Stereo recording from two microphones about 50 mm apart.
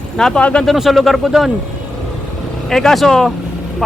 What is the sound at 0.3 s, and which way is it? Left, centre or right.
Speech, left.